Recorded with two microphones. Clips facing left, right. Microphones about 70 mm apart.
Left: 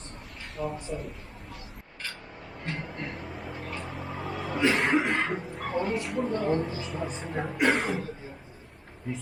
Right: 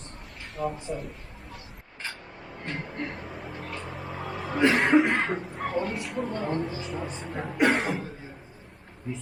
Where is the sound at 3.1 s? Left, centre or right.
Centre.